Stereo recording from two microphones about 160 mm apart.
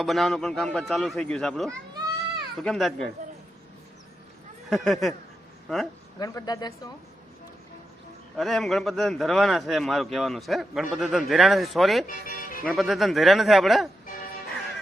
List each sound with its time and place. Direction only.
0.0 s a man's voice: centre (ahead or behind)
4.7 s a man's voice: centre (ahead or behind)
6.1 s speech: 25° left (ahead or behind)
8.4 s a man's voice: centre (ahead or behind)
12.0 s speech: 60° left (ahead or behind)
12.6 s a man's voice: centre (ahead or behind)